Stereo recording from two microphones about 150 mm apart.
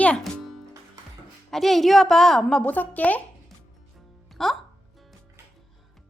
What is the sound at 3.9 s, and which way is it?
Music, centre (ahead or behind).